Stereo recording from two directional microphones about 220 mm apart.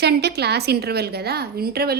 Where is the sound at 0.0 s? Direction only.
50° right (ahead or behind).